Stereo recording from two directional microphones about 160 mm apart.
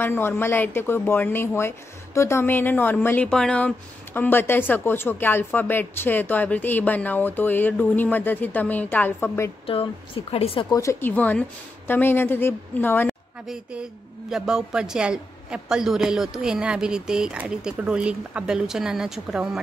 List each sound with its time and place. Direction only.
0.0 s speech: 15° left (ahead or behind)
9.7 s a woman's voice: 35° left (ahead or behind)
10.7 s speech: 20° left (ahead or behind)
13.5 s a woman's voice: 5° right (ahead or behind)